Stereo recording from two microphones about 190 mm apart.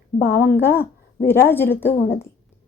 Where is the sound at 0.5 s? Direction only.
10° left (ahead or behind).